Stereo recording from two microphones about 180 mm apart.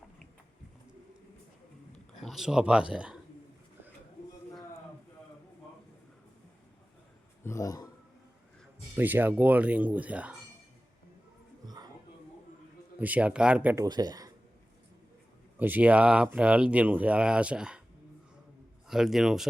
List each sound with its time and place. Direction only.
2.2 s speech: centre (ahead or behind)
7.4 s a sound: 20° left (ahead or behind)
9.0 s speech: 10° right (ahead or behind)
11.6 s a sound: 20° right (ahead or behind)
13.0 s speech: 10° right (ahead or behind)
13.8 s speech: 20° right (ahead or behind)
15.5 s speech: 10° right (ahead or behind)
18.9 s speech: centre (ahead or behind)